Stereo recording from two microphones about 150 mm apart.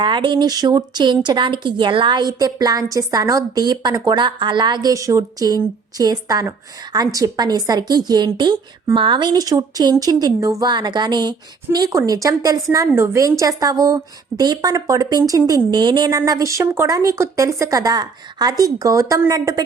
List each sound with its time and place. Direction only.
0.0 s a woman's voice: 30° right (ahead or behind)